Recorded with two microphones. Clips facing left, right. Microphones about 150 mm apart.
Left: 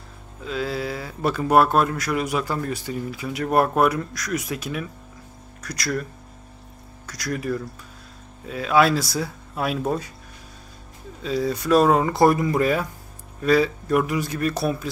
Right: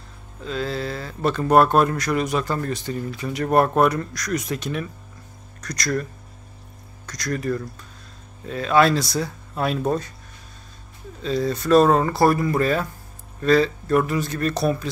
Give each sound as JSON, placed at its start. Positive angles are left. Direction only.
{"t": 0.4, "sound": "speech", "side_deg": 5}
{"t": 7.1, "sound": "speech", "side_deg": 5}
{"t": 11.2, "sound": "speech", "side_deg": 10}